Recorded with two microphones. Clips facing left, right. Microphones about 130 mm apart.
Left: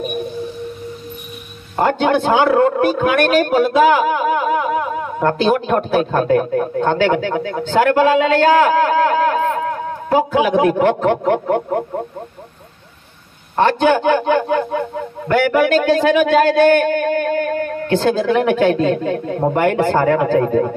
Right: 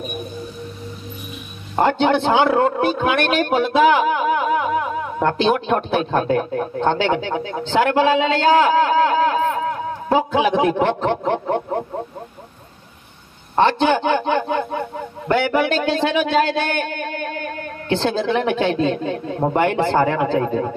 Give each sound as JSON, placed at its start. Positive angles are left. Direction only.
{"t": 1.9, "sound": "a man's voice", "side_deg": 45}
{"t": 13.6, "sound": "a man's voice", "side_deg": 45}